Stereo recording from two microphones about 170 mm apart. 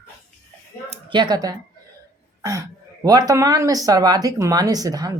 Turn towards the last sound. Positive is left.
turn(degrees=-20)  # may be behind; listen again after turning